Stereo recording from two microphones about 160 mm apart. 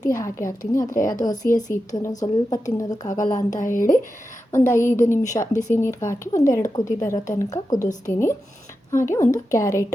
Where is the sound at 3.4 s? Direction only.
50° left (ahead or behind).